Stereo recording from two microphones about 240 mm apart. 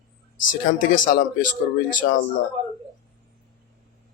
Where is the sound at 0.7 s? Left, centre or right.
Left.